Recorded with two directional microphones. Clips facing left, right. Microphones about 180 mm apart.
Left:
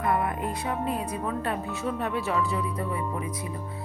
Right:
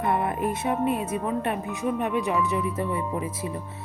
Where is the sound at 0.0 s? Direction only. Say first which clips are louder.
Right 2 dB; 25° right (ahead or behind).